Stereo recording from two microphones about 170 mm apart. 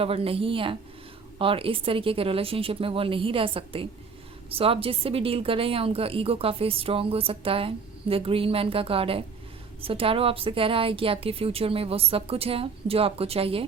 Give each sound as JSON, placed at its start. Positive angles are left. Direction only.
{"t": 0.0, "sound": "a woman's voice", "side_deg": -35}